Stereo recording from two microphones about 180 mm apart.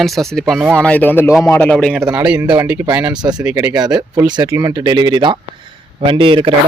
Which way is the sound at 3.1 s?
25° right (ahead or behind).